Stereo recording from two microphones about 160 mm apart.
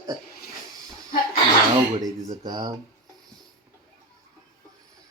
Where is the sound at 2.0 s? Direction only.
25° right (ahead or behind).